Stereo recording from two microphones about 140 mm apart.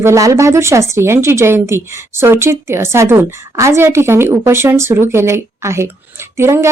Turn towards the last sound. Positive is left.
turn(degrees=-20)  # may be behind; listen again after turning